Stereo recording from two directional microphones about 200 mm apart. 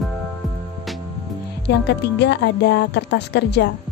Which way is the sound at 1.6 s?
60° left (ahead or behind).